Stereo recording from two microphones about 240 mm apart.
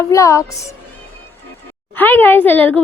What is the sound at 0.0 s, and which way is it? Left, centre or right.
Speech, centre.